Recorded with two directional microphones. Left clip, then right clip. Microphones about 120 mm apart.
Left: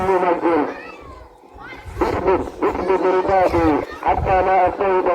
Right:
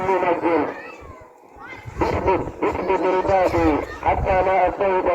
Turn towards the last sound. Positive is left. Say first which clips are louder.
# left 2 dB
turn(degrees=50)  # may be behind; listen again after turning